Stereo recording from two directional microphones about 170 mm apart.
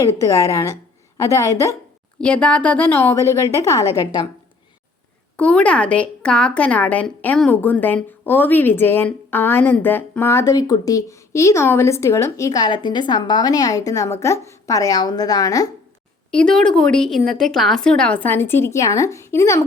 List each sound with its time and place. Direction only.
0.0 s a woman's voice: 20° left (ahead or behind)
2.2 s a woman's voice: 5° left (ahead or behind); by 4.3 s 20° left (ahead or behind)
5.4 s a woman's voice: 5° left (ahead or behind)
16.3 s a woman's voice: 5° left (ahead or behind)